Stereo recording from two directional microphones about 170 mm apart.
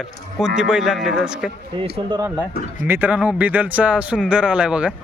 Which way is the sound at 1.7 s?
30° right (ahead or behind).